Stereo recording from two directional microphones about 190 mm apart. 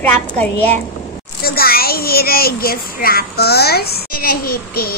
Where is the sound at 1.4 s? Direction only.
55° left (ahead or behind).